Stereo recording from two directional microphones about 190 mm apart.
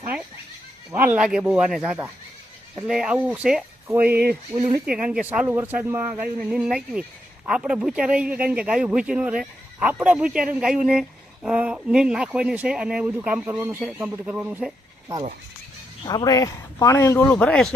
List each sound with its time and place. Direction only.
0.9 s a man's voice: 10° right (ahead or behind)
4.5 s speech: 15° right (ahead or behind)
4.9 s a man's voice: 5° right (ahead or behind)
16.0 s a man's voice: 20° left (ahead or behind)